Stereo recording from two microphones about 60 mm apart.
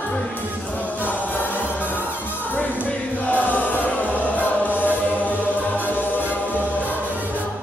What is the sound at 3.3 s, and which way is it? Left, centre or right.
Chant, left.